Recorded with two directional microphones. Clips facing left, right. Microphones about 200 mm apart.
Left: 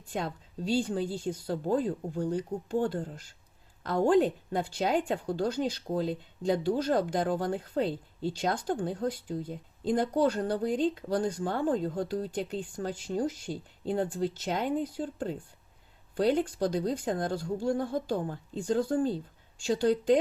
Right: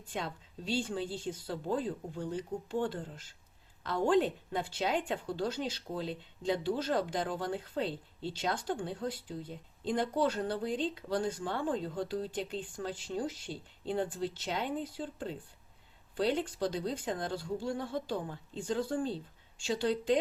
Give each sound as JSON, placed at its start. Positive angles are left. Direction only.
{"t": 0.1, "sound": "a woman's voice", "side_deg": 45}